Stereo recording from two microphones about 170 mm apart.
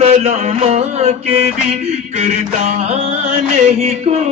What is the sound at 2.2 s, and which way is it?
Mantra, 40° right (ahead or behind).